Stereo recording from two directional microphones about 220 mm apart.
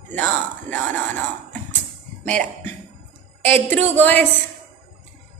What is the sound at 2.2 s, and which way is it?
A woman's voice, 5° left (ahead or behind).